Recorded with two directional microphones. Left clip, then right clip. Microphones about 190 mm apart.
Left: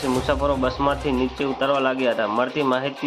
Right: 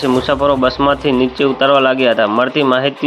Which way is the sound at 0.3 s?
25° right (ahead or behind).